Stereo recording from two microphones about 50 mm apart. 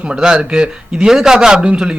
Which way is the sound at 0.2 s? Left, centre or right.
Centre.